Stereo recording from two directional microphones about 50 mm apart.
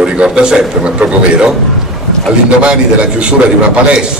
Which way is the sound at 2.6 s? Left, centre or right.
Right.